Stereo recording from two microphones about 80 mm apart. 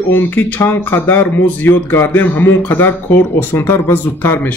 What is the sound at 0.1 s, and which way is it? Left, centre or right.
Speech, left.